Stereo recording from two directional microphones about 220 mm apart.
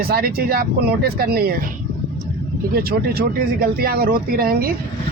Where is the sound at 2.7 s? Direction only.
45° right (ahead or behind).